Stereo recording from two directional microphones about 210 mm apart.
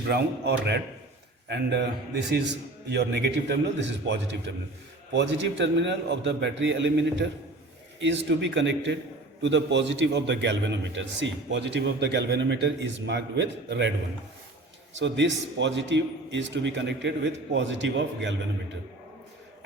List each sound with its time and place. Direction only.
0.1 s a man's voice: 50° right (ahead or behind)
14.9 s a man's voice: 60° right (ahead or behind)